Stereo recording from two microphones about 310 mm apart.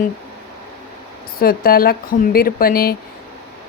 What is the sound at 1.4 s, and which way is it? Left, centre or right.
Speech, left.